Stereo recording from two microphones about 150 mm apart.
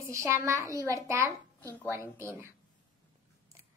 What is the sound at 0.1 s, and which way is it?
A child's voice, 20° right (ahead or behind).